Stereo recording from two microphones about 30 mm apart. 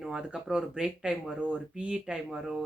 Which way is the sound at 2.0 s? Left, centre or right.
Centre.